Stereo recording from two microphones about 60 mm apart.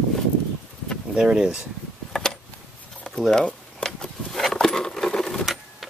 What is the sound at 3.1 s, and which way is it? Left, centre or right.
Keys jangling, centre.